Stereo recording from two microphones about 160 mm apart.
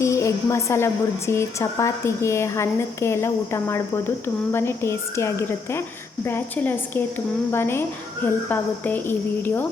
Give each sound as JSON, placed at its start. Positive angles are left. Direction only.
{"t": 0.0, "sound": "a woman's voice", "side_deg": 20}